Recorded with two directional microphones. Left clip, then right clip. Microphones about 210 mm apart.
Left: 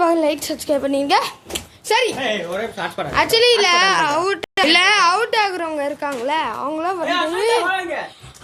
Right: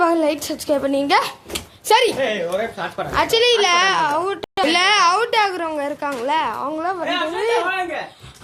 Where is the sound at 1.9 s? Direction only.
30° right (ahead or behind).